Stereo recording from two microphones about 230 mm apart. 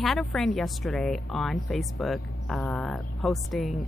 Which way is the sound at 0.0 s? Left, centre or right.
Centre.